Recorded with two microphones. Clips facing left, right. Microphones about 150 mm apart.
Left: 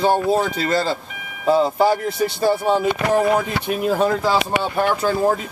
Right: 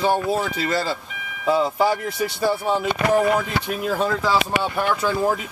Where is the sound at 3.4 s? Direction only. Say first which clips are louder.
Left 3 dB; 5° left (ahead or behind).